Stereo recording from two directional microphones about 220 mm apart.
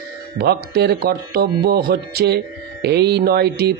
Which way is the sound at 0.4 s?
45° right (ahead or behind).